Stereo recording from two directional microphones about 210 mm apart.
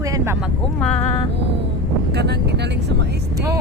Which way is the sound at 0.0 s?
15° right (ahead or behind).